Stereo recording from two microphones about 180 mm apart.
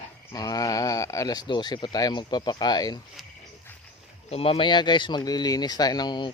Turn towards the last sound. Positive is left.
turn(degrees=25)  # may be behind; listen again after turning